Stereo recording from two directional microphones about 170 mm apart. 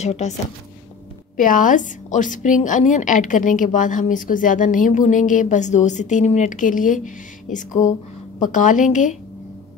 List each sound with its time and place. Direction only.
0.0 s speech: 40° left (ahead or behind)
1.3 s a woman's voice: 50° left (ahead or behind)